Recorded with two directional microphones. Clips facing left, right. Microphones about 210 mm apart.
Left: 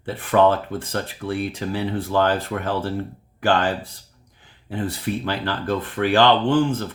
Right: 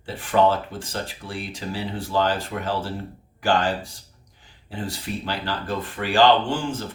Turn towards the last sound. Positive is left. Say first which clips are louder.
# left 5 dB
turn(degrees=55)  # may be behind; listen again after turning